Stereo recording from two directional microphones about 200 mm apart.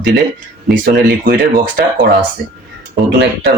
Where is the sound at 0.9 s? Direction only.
45° right (ahead or behind).